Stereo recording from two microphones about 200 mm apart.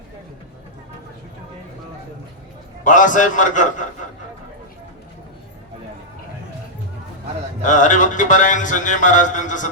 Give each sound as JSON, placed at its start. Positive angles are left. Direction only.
{"t": 2.8, "sound": "speech", "side_deg": 40}
{"t": 7.6, "sound": "speech", "side_deg": 40}